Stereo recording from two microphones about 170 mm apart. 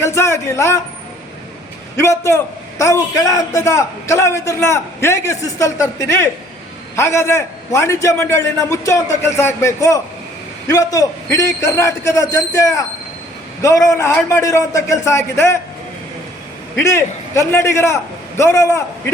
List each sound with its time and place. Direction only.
0.0 s a man's voice: 15° left (ahead or behind)
2.0 s a man's voice: 15° left (ahead or behind)
16.7 s a man's voice: 15° left (ahead or behind)